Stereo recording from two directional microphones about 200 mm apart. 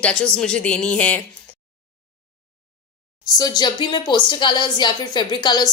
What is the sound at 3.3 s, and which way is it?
Speech, 20° left (ahead or behind).